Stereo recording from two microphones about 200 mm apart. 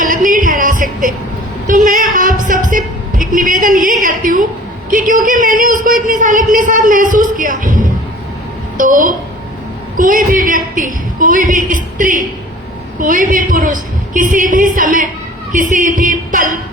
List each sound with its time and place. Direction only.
0.3 s music: 45° right (ahead or behind)
1.6 s female singing: 40° right (ahead or behind)
2.6 s a sound: 40° right (ahead or behind)
4.9 s a man's voice: 40° right (ahead or behind)